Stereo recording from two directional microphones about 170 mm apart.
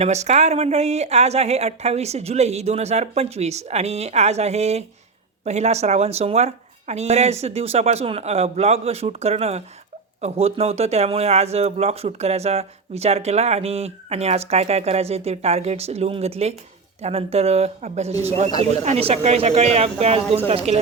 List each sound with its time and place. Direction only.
0.0 s speech: 40° right (ahead or behind)